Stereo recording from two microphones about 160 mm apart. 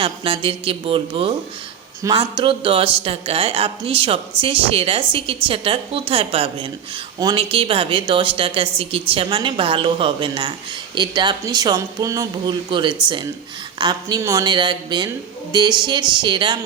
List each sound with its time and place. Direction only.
0.0 s speech: 35° right (ahead or behind)